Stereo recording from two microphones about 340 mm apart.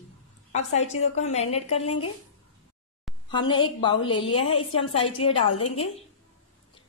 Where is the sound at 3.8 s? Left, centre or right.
Centre.